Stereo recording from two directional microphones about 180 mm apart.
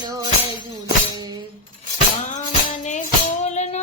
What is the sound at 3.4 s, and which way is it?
Music, 40° left (ahead or behind).